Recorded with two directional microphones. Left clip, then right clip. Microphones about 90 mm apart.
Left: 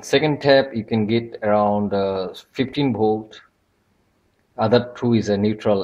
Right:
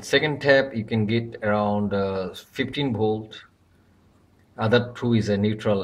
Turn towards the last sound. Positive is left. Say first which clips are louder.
# left 4 dB
turn(degrees=30)  # may be behind; listen again after turning